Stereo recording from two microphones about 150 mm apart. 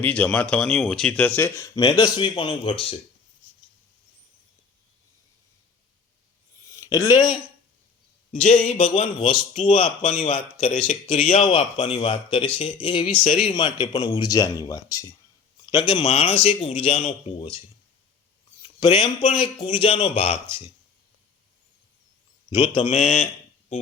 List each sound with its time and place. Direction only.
0.0 s speech: 10° left (ahead or behind); by 3.0 s 40° left (ahead or behind)
6.7 s speech: 20° left (ahead or behind)
8.3 s speech: 55° left (ahead or behind)
9.1 s speech: 30° left (ahead or behind)
13.2 s speech: 60° left (ahead or behind)
13.5 s speech: 30° left (ahead or behind)
16.0 s speech: 40° left (ahead or behind)
18.6 s a sound: 30° left (ahead or behind)
19.3 s speech: 35° left (ahead or behind)
22.4 s a man's voice: 35° left (ahead or behind)